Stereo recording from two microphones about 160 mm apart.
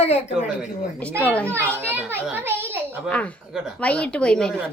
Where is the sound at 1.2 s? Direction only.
10° left (ahead or behind).